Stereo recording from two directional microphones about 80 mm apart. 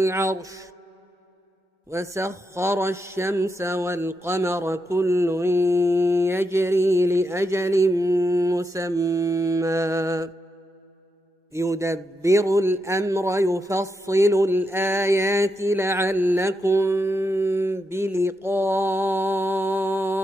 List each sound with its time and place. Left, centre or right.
0.0 s a man's voice: right
1.9 s a man's voice: right
11.5 s a man's voice: right
16.4 s mantra: right